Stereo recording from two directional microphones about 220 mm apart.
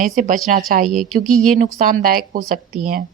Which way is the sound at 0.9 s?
Centre (ahead or behind).